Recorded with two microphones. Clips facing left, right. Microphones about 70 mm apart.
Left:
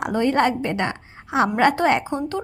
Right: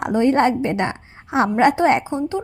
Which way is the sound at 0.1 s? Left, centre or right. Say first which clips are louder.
Right 4 dB; right.